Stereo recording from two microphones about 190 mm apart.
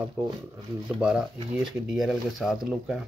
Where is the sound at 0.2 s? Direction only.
10° right (ahead or behind).